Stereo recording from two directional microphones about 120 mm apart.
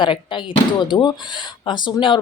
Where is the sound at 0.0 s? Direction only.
40° left (ahead or behind).